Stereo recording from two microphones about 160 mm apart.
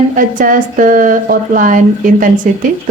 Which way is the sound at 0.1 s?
55° right (ahead or behind).